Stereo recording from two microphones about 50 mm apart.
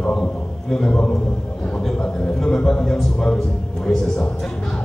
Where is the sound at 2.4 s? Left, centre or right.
Centre.